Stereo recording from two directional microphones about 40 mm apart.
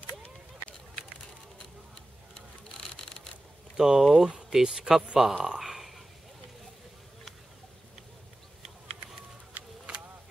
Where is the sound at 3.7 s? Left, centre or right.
Centre.